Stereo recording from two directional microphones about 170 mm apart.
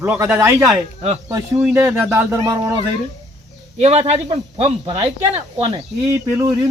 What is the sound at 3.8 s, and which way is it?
Speech, 35° right (ahead or behind).